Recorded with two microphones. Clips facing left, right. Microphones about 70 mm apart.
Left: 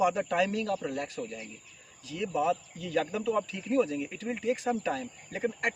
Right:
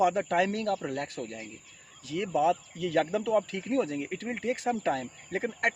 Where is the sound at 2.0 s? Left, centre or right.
Right.